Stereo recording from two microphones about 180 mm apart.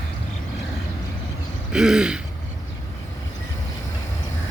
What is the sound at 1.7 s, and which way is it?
Speech, 5° right (ahead or behind).